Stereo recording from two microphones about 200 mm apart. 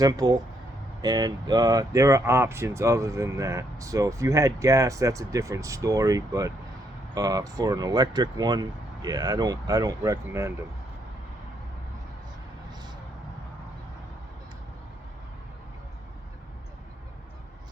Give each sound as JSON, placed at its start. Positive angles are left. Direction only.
{"t": 0.0, "sound": "speech", "side_deg": -20}